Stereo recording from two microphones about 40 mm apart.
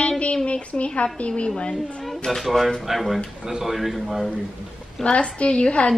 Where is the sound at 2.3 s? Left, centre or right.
Centre.